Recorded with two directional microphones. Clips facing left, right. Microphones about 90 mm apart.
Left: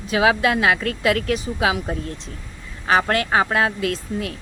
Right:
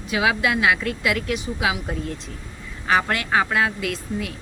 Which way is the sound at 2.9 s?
35° left (ahead or behind).